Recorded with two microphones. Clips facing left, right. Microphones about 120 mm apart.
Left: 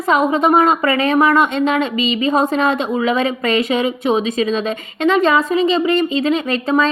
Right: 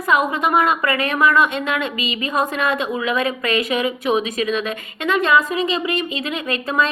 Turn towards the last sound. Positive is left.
turn(degrees=30)  # may be behind; listen again after turning